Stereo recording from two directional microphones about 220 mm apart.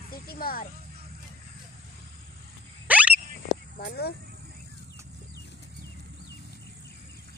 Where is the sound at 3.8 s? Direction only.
45° left (ahead or behind).